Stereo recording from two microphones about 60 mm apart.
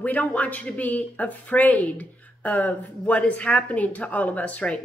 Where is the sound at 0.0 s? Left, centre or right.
Left.